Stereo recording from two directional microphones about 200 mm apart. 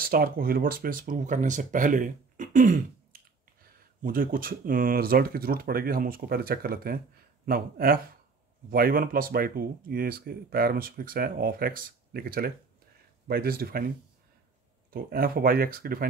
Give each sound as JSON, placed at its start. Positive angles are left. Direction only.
{"t": 0.0, "sound": "speech", "side_deg": -45}
{"t": 14.9, "sound": "speech", "side_deg": -45}